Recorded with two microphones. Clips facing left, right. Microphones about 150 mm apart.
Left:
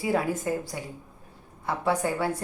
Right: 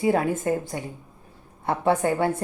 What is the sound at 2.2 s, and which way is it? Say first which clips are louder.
Speech: right 4 dB; 25° right (ahead or behind).